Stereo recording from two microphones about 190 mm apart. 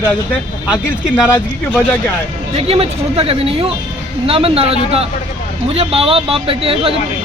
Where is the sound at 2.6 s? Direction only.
30° right (ahead or behind).